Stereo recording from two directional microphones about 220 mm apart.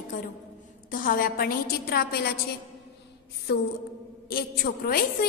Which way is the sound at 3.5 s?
50° left (ahead or behind).